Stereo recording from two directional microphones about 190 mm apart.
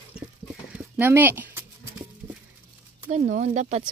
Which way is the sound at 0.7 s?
10° right (ahead or behind).